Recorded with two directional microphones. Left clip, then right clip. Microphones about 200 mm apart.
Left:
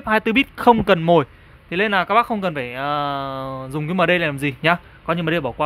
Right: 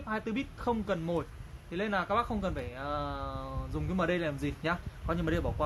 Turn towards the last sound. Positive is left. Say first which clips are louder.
# left 12 dB
turn(degrees=40)  # may be behind; listen again after turning